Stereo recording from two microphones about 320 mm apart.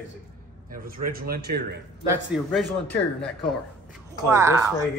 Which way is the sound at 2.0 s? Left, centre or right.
Centre.